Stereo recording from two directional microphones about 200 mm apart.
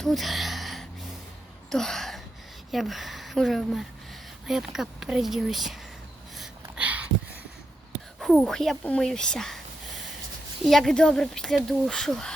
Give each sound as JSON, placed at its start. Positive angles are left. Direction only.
{"t": 0.0, "sound": "gasp", "side_deg": 0}
{"t": 2.7, "sound": "speech", "side_deg": 0}
{"t": 6.3, "sound": "a sound", "side_deg": -5}
{"t": 8.2, "sound": "speech", "side_deg": 0}
{"t": 10.7, "sound": "speech", "side_deg": 0}